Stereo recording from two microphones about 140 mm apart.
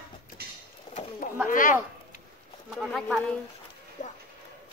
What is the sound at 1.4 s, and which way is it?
Speech, 70° left (ahead or behind).